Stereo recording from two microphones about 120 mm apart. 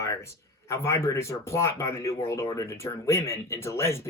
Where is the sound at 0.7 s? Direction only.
20° left (ahead or behind).